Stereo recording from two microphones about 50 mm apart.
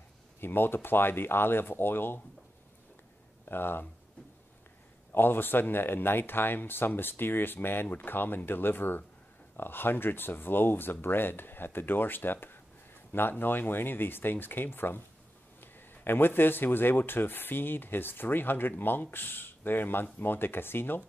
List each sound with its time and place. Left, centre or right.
0.4 s speech: left
3.4 s speech: left
5.1 s speech: left